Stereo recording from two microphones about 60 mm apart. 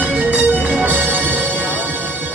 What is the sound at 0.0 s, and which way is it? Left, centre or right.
Music, right.